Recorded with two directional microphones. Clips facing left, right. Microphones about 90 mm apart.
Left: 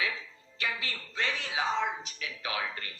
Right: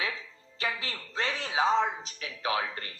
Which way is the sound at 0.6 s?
35° right (ahead or behind).